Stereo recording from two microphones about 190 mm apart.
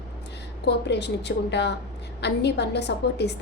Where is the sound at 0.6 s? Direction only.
65° left (ahead or behind).